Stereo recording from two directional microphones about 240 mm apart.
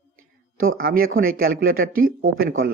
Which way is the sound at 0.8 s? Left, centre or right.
Right.